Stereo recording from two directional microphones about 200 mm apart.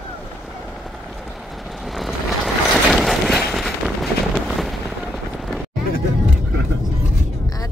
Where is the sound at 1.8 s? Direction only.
Centre (ahead or behind).